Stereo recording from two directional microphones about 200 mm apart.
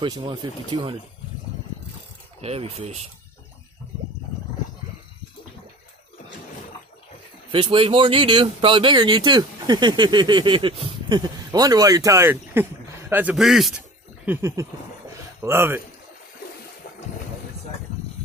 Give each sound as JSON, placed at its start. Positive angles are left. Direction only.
{"t": 0.0, "sound": "speech", "side_deg": -20}
{"t": 2.4, "sound": "speech", "side_deg": -30}
{"t": 7.5, "sound": "a man's voice", "side_deg": -25}
{"t": 14.2, "sound": "a sound", "side_deg": -10}